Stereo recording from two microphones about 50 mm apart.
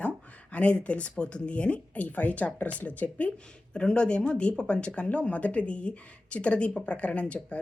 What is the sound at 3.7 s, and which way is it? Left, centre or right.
A woman's voice, centre.